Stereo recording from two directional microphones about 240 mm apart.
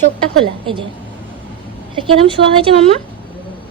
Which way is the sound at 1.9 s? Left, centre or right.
Right.